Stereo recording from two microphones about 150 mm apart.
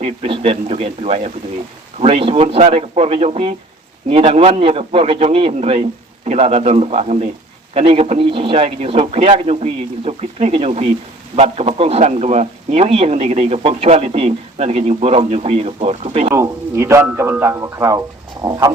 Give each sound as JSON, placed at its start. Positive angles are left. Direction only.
{"t": 0.0, "sound": "a man's voice", "side_deg": -45}
{"t": 16.3, "sound": "speech", "side_deg": -15}